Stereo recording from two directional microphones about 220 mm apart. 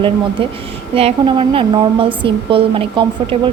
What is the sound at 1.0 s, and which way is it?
Speech, 25° right (ahead or behind).